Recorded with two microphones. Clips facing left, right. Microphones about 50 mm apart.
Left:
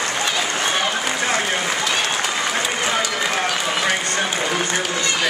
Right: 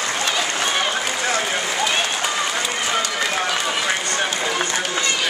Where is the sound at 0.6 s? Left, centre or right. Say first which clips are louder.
Left 1 dB; centre.